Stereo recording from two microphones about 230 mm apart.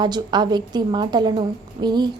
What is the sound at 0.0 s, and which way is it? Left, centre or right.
A woman's voice, centre.